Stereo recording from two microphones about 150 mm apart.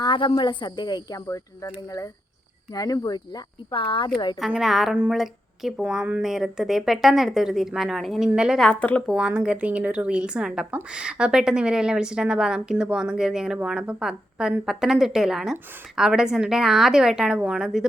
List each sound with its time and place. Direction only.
0.0 s speech: 35° left (ahead or behind)
2.7 s speech: 25° left (ahead or behind)
4.4 s a woman's voice: 5° right (ahead or behind)
9.0 s a woman's voice: 5° right (ahead or behind)